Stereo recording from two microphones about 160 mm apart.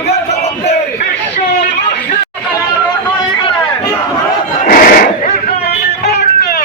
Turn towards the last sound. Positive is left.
turn(degrees=65)  # may be behind; listen again after turning